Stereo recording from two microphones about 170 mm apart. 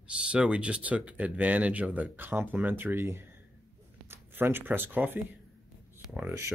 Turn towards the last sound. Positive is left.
turn(degrees=-10)  # may be behind; listen again after turning